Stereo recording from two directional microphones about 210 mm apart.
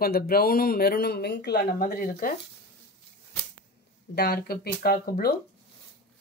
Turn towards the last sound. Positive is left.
turn(degrees=45)  # may be behind; listen again after turning